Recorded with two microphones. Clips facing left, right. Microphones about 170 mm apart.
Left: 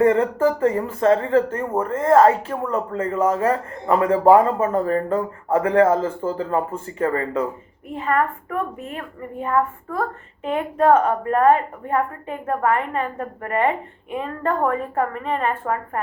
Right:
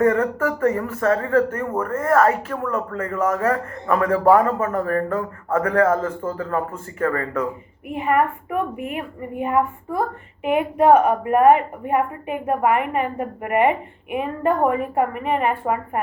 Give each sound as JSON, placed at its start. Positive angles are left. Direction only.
{"t": 0.0, "sound": "speech", "side_deg": 30}
{"t": 7.9, "sound": "a woman's voice", "side_deg": -15}